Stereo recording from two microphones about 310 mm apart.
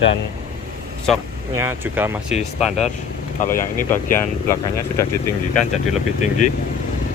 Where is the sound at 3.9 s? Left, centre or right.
Centre.